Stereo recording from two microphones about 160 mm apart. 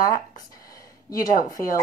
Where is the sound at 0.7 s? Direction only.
20° left (ahead or behind).